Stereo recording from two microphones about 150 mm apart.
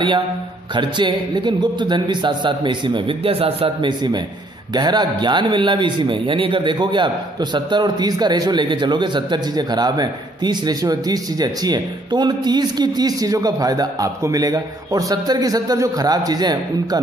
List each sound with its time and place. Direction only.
0.7 s a man's voice: 30° right (ahead or behind)